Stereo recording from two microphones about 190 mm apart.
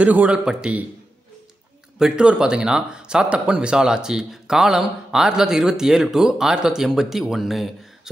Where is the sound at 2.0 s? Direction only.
5° right (ahead or behind).